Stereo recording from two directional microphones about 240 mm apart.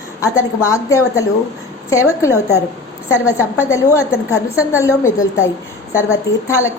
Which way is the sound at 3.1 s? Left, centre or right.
Centre.